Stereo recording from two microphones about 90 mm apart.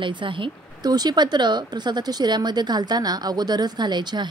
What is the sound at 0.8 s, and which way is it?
Speech, 50° right (ahead or behind).